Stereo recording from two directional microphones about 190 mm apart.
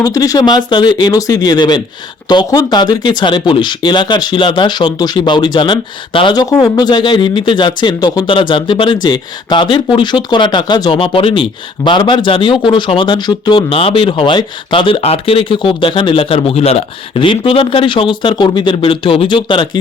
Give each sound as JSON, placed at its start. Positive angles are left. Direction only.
{"t": 0.0, "sound": "speech", "side_deg": 20}